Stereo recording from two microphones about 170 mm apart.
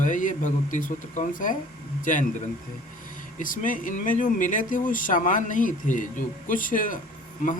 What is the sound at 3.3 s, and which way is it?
Speech, 50° left (ahead or behind).